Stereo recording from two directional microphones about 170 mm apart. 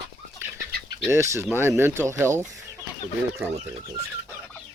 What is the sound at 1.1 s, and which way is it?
Speech, 15° right (ahead or behind).